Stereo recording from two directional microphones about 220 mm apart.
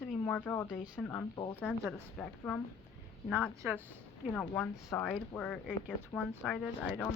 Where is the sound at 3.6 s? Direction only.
10° right (ahead or behind).